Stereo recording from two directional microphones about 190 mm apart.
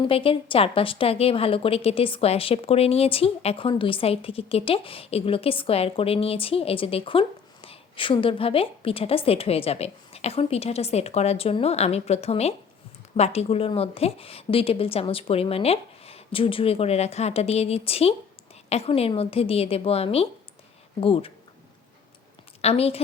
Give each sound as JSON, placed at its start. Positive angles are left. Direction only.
{"t": 0.0, "sound": "a woman's voice", "side_deg": 30}
{"t": 22.6, "sound": "a woman's voice", "side_deg": 30}